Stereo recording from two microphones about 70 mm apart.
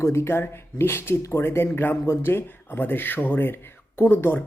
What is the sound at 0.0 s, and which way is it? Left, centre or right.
Speech, left.